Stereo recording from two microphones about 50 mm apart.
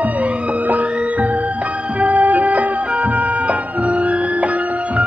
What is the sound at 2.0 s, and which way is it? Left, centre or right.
Music, right.